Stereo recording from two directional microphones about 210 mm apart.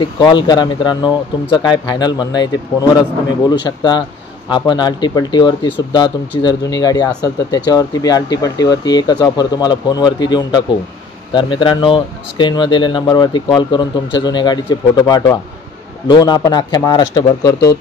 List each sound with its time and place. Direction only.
0.0 s speech: 20° left (ahead or behind)